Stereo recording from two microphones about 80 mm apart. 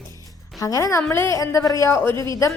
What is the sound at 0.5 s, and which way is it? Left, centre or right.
Music, left.